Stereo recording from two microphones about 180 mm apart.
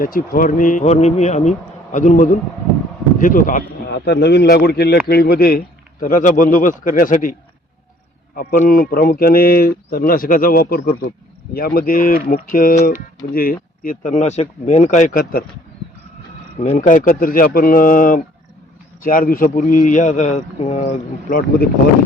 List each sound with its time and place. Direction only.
0.0 s speech: 50° left (ahead or behind)
3.9 s speech: 65° left (ahead or behind); by 7.3 s 50° left (ahead or behind)
8.4 s speech: 55° left (ahead or behind)
16.6 s speech: 45° left (ahead or behind)